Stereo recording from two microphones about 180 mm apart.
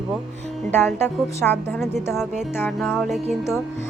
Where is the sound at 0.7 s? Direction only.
10° left (ahead or behind).